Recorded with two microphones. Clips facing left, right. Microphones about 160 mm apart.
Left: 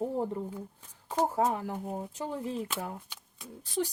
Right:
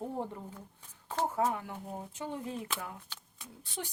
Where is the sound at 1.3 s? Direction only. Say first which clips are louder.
Left 3 dB; 35° left (ahead or behind).